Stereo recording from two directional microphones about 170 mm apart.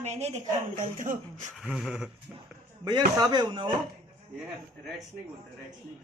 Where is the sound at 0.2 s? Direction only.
45° right (ahead or behind).